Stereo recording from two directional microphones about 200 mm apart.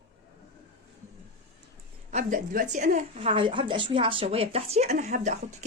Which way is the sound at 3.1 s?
25° right (ahead or behind).